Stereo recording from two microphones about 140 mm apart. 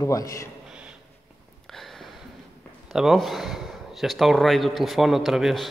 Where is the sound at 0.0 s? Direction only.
25° left (ahead or behind).